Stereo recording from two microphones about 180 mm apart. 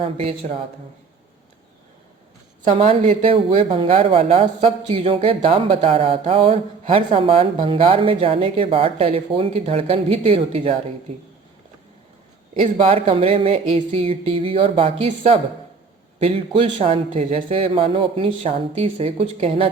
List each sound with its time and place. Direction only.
0.0 s speech: 35° right (ahead or behind)
2.6 s speech: 35° right (ahead or behind)
12.7 s speech: 35° right (ahead or behind)